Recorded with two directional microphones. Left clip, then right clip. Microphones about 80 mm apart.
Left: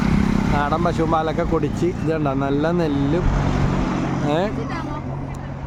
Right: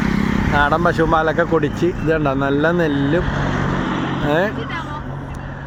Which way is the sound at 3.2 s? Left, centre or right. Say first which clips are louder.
Right 3 dB; right.